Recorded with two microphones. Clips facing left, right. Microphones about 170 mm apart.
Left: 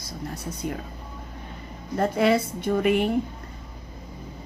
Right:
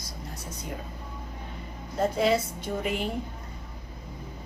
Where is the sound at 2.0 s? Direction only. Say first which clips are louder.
Left 3 dB; 60° left (ahead or behind).